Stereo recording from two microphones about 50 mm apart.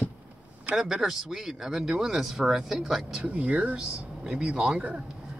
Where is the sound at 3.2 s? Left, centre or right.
Right.